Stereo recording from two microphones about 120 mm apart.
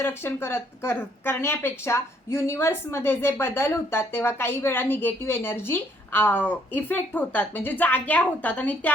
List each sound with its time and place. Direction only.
0.0 s speech: 20° left (ahead or behind)